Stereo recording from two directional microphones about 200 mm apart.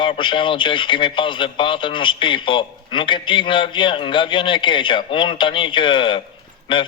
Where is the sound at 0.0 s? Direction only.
25° left (ahead or behind).